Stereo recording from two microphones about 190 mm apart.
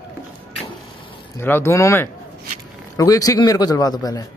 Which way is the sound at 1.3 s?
10° left (ahead or behind).